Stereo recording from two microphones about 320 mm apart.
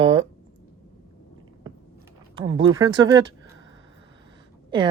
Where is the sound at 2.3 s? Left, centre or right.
Centre.